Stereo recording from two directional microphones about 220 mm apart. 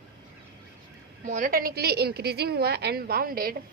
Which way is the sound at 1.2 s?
35° right (ahead or behind).